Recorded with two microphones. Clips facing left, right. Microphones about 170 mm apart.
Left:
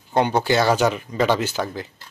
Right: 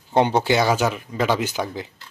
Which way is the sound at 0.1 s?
25° right (ahead or behind).